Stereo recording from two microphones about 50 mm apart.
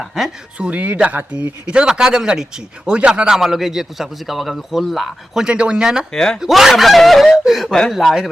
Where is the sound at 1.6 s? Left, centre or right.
Centre.